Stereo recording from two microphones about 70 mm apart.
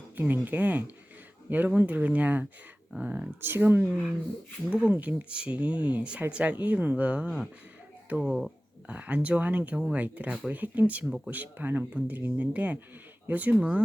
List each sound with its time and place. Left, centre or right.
0.2 s speech: right
8.2 s speech: centre
8.9 s speech: centre